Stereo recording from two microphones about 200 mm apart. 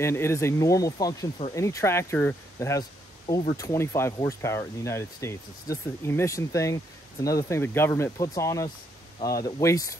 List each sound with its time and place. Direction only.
0.0 s speech: 15° left (ahead or behind)